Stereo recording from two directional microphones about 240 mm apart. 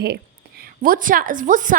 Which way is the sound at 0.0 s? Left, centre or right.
Right.